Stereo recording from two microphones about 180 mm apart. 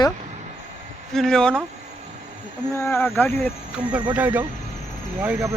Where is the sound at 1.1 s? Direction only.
5° left (ahead or behind).